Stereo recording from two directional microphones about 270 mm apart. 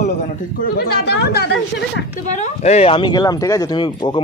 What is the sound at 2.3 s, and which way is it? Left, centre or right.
Speech, left.